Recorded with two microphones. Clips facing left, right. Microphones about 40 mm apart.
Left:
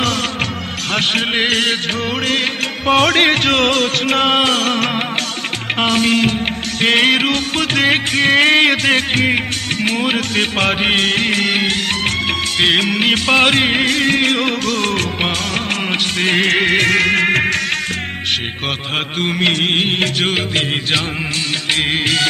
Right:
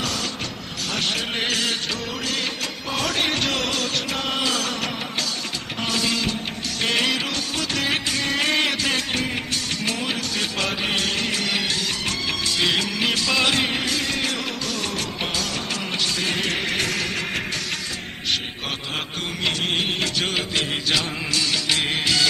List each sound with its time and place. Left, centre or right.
0.9 s music: left
19.4 s music: left
21.7 s music: left